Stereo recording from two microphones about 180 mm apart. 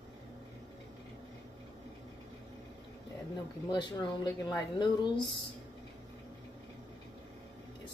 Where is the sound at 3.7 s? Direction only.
25° left (ahead or behind).